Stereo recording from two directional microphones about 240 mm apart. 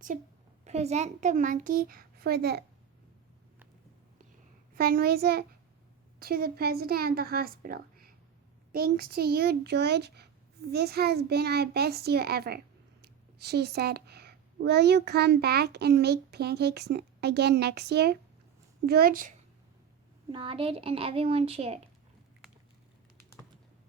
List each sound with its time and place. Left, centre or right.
0.1 s a child's voice: right
4.7 s a child's voice: right
20.3 s a woman's voice: right